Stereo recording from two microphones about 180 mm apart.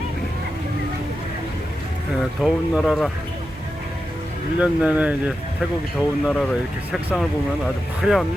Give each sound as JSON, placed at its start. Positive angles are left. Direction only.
{"t": 2.4, "sound": "speech", "side_deg": 0}
{"t": 4.6, "sound": "speech", "side_deg": -5}